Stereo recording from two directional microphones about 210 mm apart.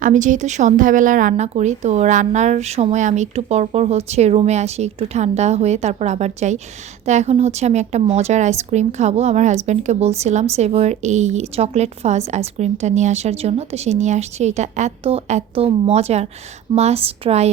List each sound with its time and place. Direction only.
0.0 s a woman's voice: 35° right (ahead or behind)